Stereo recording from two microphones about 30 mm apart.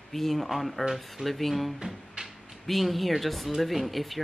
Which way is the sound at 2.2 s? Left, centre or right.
Right.